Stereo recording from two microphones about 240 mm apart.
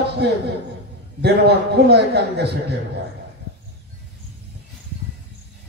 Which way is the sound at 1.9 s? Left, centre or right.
Right.